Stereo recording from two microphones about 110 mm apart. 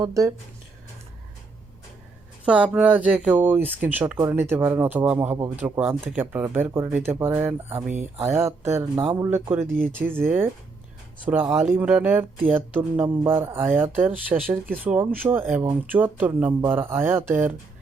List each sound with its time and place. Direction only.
0.0 s speech: 30° right (ahead or behind)
2.4 s speech: 10° right (ahead or behind)
6.7 s speech: 30° right (ahead or behind)
7.9 s speech: 90° right
8.4 s speech: 25° right (ahead or behind)